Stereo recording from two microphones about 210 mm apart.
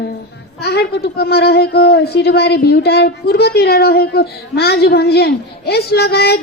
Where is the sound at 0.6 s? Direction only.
50° left (ahead or behind).